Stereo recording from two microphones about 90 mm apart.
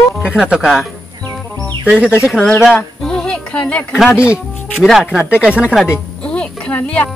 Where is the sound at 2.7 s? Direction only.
10° left (ahead or behind).